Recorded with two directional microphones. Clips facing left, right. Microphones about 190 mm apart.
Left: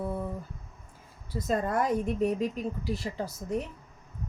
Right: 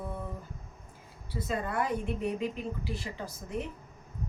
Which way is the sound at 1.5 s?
45° left (ahead or behind).